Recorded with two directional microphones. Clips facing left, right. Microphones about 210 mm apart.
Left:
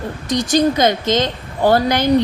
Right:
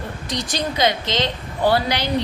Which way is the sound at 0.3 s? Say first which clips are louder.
Left 11 dB; 45° left (ahead or behind).